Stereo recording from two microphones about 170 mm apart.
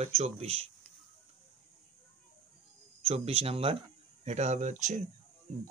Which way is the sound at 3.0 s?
35° right (ahead or behind).